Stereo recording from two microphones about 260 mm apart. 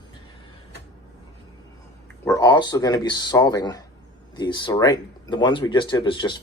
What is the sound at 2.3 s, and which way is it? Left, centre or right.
Speech, centre.